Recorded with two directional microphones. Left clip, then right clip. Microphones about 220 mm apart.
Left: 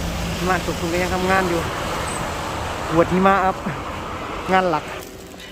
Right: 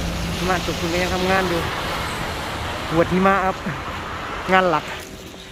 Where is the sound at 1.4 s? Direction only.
55° left (ahead or behind).